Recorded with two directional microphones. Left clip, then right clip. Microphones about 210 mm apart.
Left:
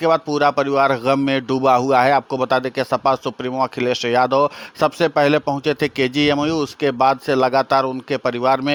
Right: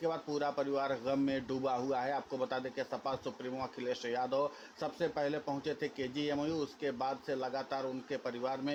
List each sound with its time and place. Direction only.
0.0 s a man's voice: 50° left (ahead or behind)